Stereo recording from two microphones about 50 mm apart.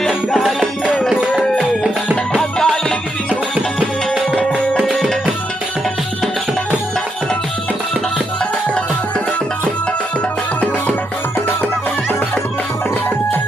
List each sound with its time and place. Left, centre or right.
0.3 s music: centre
2.3 s music: centre
3.5 s music: centre